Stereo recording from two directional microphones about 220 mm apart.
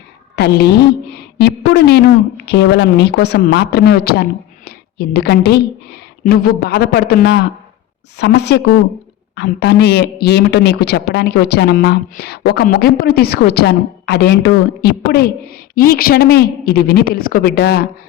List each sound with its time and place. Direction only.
0.3 s a woman's voice: 50° left (ahead or behind)